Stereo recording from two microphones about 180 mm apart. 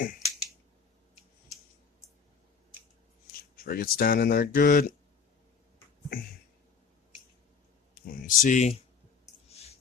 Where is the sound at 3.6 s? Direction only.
55° left (ahead or behind).